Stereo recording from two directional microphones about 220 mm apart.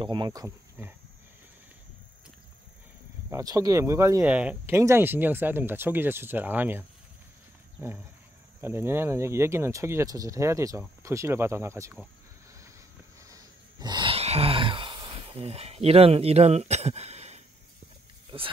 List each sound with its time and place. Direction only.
0.0 s speech: 20° right (ahead or behind)
3.3 s speech: 15° right (ahead or behind)
7.8 s speech: 10° right (ahead or behind)
13.2 s a sound: 15° right (ahead or behind)